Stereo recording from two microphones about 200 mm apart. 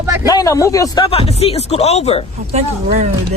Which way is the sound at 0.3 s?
15° left (ahead or behind).